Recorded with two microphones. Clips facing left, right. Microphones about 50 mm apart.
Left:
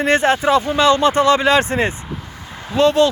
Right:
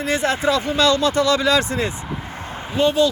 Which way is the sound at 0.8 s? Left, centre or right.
Left.